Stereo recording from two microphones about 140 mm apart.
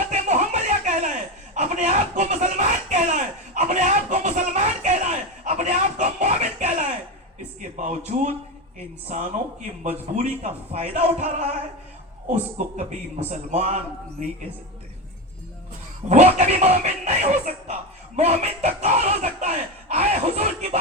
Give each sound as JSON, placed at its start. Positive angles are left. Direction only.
{"t": 0.0, "sound": "chuckle", "side_deg": -55}
{"t": 5.5, "sound": "a sound", "side_deg": -55}
{"t": 7.8, "sound": "speech", "side_deg": -60}
{"t": 12.3, "sound": "a man's voice", "side_deg": -55}
{"t": 16.0, "sound": "speech", "side_deg": -55}